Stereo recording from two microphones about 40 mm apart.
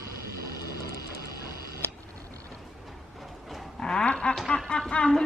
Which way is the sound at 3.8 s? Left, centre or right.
Centre.